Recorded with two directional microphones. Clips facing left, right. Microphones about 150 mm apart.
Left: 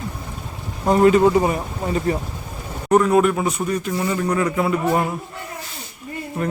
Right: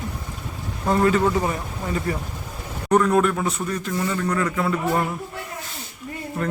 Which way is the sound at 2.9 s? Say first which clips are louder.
Left 3 dB; 10° left (ahead or behind).